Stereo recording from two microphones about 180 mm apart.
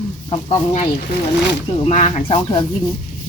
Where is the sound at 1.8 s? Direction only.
35° left (ahead or behind).